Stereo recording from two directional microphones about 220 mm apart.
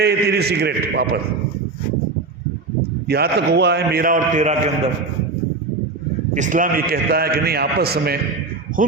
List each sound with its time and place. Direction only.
0.0 s a man's voice: 50° right (ahead or behind)
3.1 s a man's voice: 50° right (ahead or behind); by 4.7 s 30° right (ahead or behind)
6.3 s a man's voice: 35° right (ahead or behind)